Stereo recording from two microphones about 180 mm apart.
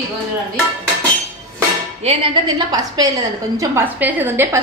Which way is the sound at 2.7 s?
20° right (ahead or behind).